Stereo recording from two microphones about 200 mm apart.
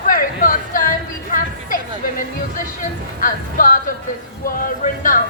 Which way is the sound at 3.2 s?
45° left (ahead or behind).